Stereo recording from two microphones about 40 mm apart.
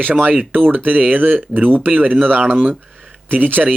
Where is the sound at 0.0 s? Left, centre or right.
Right.